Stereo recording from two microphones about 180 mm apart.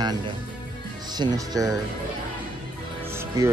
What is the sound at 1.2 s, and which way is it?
Speech, 20° right (ahead or behind).